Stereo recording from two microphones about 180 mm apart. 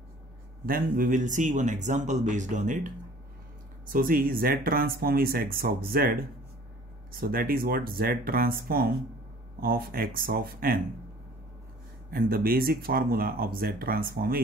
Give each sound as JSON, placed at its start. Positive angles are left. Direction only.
{"t": 0.7, "sound": "speech", "side_deg": -50}
{"t": 3.9, "sound": "speech", "side_deg": -50}
{"t": 7.2, "sound": "speech", "side_deg": -55}
{"t": 12.1, "sound": "speech", "side_deg": -55}